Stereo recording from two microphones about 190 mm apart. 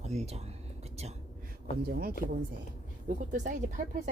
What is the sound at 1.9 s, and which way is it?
Speech, 50° right (ahead or behind).